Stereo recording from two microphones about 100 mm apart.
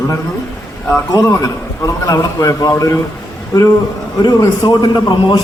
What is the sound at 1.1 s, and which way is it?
A man's voice, 35° left (ahead or behind).